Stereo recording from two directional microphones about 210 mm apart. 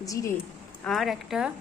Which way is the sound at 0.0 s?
15° left (ahead or behind).